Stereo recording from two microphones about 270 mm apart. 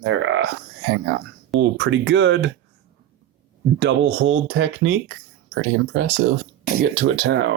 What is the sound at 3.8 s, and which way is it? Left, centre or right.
Speech, right.